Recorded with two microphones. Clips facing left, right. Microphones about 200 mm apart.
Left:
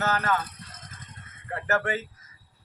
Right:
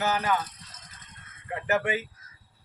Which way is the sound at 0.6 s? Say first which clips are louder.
Left 5 dB; 55° left (ahead or behind).